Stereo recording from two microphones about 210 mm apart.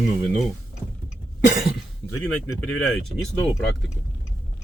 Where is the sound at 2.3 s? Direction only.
90° left.